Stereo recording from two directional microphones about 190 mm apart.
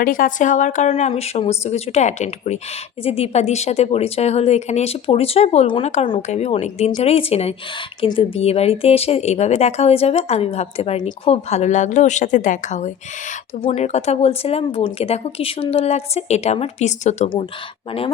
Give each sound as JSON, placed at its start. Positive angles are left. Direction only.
{"t": 0.0, "sound": "speech", "side_deg": 45}